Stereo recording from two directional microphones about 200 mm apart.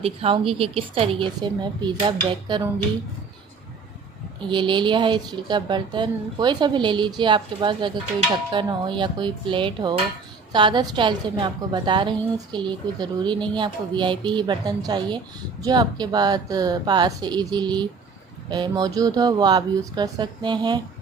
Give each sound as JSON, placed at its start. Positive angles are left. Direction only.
{"t": 0.0, "sound": "a woman's voice", "side_deg": -30}
{"t": 4.4, "sound": "a woman's voice", "side_deg": -25}